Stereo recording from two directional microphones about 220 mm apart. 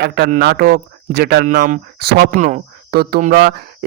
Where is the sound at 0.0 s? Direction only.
45° right (ahead or behind).